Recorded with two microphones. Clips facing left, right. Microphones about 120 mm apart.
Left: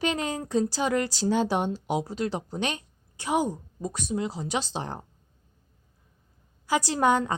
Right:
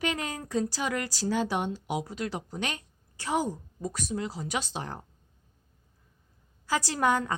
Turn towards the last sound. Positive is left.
turn(degrees=25)  # may be behind; listen again after turning